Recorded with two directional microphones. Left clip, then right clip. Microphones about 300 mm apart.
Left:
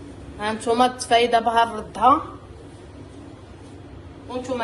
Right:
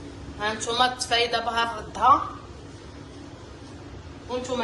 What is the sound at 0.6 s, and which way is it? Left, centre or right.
A woman's voice, left.